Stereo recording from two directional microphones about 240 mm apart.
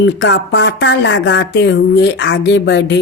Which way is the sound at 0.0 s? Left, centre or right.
Left.